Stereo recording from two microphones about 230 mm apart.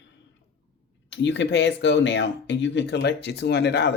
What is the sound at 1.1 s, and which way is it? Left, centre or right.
Speech, left.